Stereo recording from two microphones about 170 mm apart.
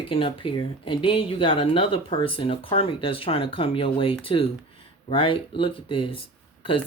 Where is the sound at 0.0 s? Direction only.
30° left (ahead or behind).